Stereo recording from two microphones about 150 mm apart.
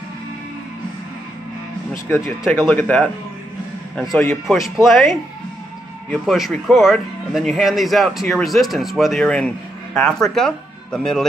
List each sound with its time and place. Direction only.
2.0 s speech: 15° left (ahead or behind)
2.4 s speech: 5° right (ahead or behind)
2.7 s a man's voice: 10° left (ahead or behind)